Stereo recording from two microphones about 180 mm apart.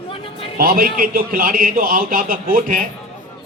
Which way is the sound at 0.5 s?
55° right (ahead or behind).